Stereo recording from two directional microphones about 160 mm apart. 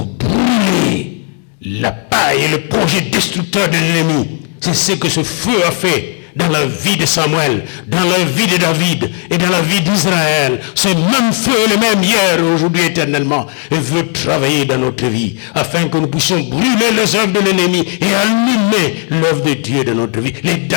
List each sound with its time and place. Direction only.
0.2 s vehicle: 45° left (ahead or behind)
1.7 s music: 45° left (ahead or behind); by 20.7 s 20° left (ahead or behind)